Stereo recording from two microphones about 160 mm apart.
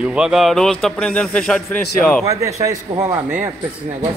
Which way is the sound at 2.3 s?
20° right (ahead or behind).